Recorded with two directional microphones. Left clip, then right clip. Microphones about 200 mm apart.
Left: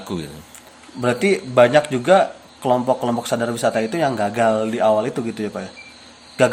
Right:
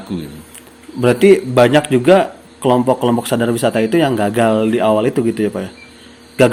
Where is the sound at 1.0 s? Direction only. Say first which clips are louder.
Right 8 dB; 15° right (ahead or behind).